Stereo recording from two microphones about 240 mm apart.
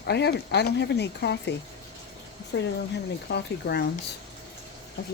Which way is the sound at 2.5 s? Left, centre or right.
Left.